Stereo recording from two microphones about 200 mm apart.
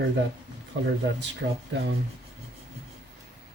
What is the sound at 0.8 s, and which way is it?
Speech, 60° right (ahead or behind).